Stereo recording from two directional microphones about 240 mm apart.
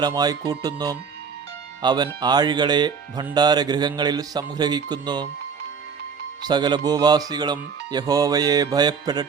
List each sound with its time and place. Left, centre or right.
0.0 s speech: centre
6.5 s speech: centre